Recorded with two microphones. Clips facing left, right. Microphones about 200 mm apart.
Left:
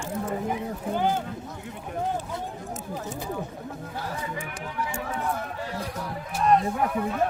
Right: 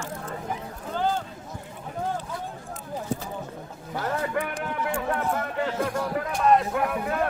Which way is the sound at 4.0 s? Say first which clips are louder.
Right 8 dB; 65° right (ahead or behind).